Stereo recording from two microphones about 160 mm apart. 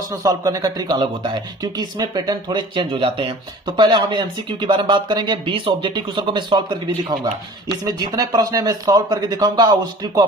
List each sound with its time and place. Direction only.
0.1 s speech: 20° right (ahead or behind)